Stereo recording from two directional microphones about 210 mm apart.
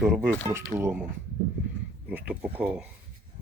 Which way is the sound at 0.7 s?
10° right (ahead or behind).